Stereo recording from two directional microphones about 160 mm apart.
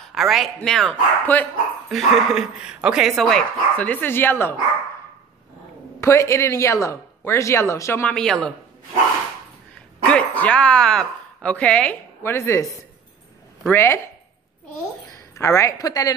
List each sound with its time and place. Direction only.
0.0 s a sound: centre (ahead or behind)
0.6 s speech: 5° left (ahead or behind)
1.9 s speech: centre (ahead or behind)
5.9 s speech: 15° left (ahead or behind)
10.0 s a woman's voice: 10° left (ahead or behind)
13.7 s speech: 15° left (ahead or behind)
15.3 s a woman's voice: 20° left (ahead or behind)